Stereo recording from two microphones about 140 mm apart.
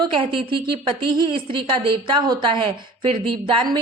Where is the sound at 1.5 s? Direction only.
35° right (ahead or behind).